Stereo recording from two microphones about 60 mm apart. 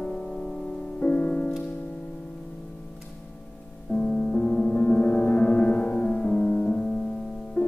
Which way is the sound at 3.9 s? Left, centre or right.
Centre.